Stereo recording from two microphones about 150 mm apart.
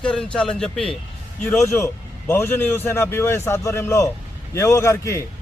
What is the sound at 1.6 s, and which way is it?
A man's voice, 20° left (ahead or behind).